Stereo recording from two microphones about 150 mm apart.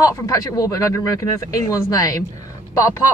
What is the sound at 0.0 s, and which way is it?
Speech, 25° left (ahead or behind).